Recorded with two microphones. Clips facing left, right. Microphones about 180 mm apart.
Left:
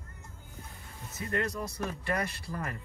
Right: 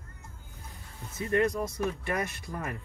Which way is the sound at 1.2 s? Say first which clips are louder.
Right 6 dB; 20° right (ahead or behind).